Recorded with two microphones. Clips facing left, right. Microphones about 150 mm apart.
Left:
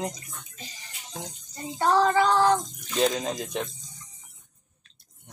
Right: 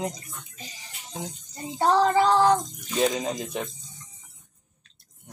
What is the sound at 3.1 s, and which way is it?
Speech, 5° right (ahead or behind).